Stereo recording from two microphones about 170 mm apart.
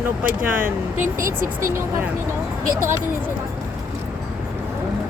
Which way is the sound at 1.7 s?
15° right (ahead or behind).